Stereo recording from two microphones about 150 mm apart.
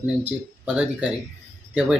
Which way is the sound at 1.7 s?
5° right (ahead or behind).